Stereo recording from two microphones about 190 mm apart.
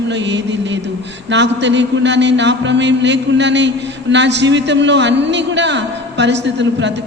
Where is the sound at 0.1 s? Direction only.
70° right (ahead or behind).